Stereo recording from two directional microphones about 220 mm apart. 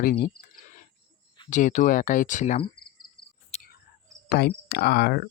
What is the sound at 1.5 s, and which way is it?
Speech, 35° left (ahead or behind).